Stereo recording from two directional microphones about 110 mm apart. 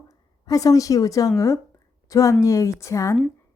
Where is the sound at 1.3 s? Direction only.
30° left (ahead or behind).